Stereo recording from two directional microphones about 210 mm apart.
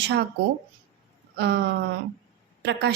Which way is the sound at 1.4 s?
55° right (ahead or behind).